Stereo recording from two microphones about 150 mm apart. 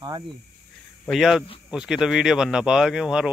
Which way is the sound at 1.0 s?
Centre (ahead or behind).